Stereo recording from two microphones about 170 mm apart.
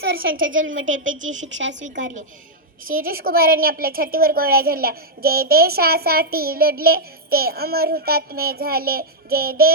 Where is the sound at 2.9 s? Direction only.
60° right (ahead or behind).